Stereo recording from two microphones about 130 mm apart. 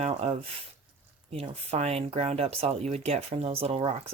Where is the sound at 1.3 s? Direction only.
50° right (ahead or behind).